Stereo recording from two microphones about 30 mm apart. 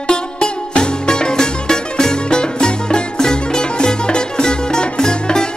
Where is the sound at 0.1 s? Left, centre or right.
Left.